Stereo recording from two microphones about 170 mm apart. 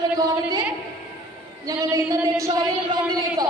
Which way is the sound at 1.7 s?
20° right (ahead or behind).